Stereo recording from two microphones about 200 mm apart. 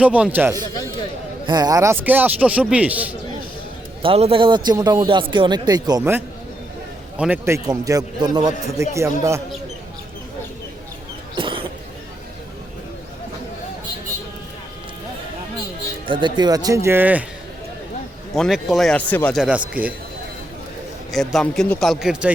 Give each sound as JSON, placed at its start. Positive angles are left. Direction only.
{"t": 0.0, "sound": "a man's voice", "side_deg": -5}
{"t": 4.0, "sound": "a man's voice", "side_deg": -30}
{"t": 11.3, "sound": "cough", "side_deg": -25}
{"t": 16.0, "sound": "a man's voice", "side_deg": -25}
{"t": 18.3, "sound": "a man's voice", "side_deg": 0}
{"t": 19.4, "sound": "a man's voice", "side_deg": -5}
{"t": 21.1, "sound": "a man's voice", "side_deg": 0}